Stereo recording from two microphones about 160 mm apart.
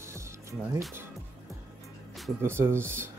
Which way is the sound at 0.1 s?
15° right (ahead or behind).